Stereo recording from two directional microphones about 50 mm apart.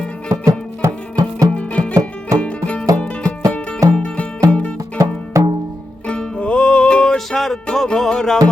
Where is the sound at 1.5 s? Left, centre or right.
Left.